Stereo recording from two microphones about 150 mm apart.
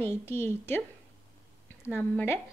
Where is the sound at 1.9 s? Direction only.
15° left (ahead or behind).